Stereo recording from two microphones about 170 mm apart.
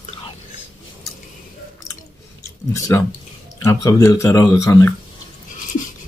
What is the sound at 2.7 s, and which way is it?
Speech, 15° left (ahead or behind).